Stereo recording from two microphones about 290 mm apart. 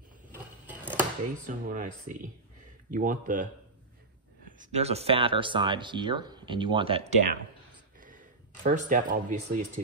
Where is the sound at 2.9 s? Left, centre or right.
Right.